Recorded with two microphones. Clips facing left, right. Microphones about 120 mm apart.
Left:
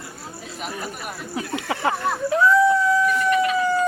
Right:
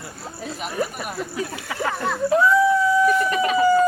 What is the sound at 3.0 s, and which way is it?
Chicken, 35° right (ahead or behind).